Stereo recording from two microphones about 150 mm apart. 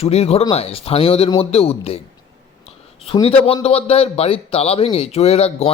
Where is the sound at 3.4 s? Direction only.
40° left (ahead or behind).